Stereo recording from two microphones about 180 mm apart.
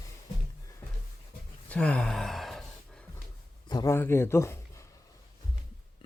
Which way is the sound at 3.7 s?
20° left (ahead or behind).